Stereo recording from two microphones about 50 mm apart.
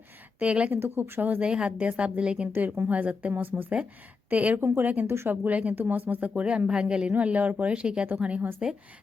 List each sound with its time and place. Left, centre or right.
0.3 s speech: right
0.7 s speech: right
1.4 s speech: right
2.5 s speech: right
5.0 s speech: right
5.3 s a man's voice: right
7.3 s speech: right
8.4 s speech: right